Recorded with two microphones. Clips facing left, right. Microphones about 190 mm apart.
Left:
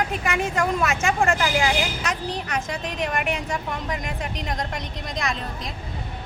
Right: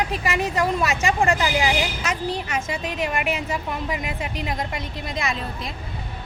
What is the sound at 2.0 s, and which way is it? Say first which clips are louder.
A woman's voice: right 2 dB; centre (ahead or behind).